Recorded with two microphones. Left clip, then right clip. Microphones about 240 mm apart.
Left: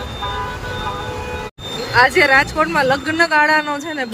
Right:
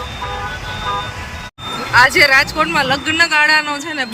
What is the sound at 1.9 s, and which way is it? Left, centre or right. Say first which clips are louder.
Speech: right 2 dB; centre.